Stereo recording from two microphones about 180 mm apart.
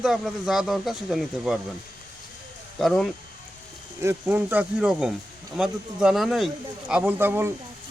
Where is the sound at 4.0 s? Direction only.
10° right (ahead or behind).